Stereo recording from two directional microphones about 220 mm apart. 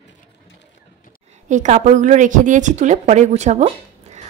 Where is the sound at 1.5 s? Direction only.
35° right (ahead or behind).